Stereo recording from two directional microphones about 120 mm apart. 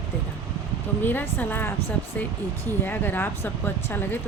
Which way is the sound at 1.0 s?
15° left (ahead or behind).